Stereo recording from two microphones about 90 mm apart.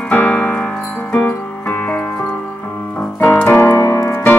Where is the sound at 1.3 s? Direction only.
20° left (ahead or behind).